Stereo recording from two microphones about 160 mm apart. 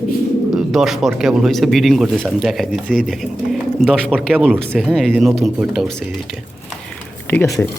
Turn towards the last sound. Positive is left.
turn(degrees=15)  # may be behind; listen again after turning